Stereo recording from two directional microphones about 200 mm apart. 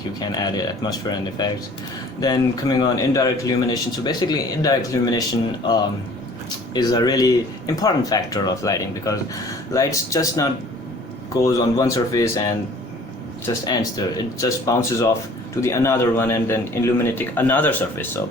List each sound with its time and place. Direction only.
0.2 s speech: 20° left (ahead or behind)
6.7 s a man's voice: 20° left (ahead or behind)